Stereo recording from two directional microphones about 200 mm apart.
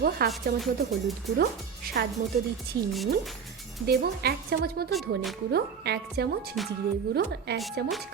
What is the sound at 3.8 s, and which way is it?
A woman's voice, 50° right (ahead or behind).